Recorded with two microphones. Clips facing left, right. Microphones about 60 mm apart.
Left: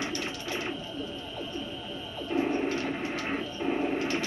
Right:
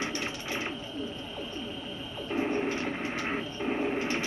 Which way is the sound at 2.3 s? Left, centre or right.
Centre.